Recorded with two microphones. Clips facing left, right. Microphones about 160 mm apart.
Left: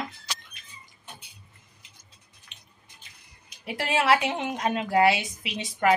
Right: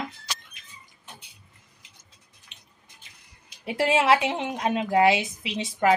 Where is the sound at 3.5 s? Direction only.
25° right (ahead or behind).